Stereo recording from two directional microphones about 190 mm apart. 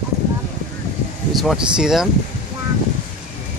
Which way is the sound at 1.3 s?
Centre (ahead or behind).